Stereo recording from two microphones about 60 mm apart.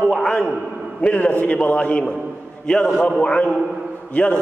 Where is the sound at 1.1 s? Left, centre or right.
Left.